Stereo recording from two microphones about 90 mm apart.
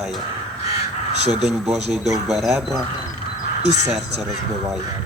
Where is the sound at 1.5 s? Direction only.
5° right (ahead or behind).